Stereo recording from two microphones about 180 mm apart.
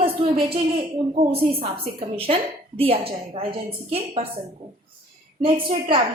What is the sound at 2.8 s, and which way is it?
A woman's voice, 30° right (ahead or behind).